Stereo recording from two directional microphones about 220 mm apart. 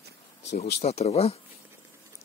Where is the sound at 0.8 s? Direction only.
30° left (ahead or behind).